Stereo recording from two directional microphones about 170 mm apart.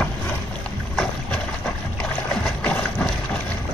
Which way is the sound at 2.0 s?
5° left (ahead or behind).